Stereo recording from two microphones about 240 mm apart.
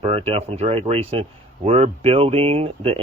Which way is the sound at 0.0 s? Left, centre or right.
Right.